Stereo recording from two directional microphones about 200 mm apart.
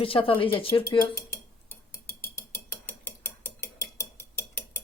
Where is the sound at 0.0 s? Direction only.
25° left (ahead or behind).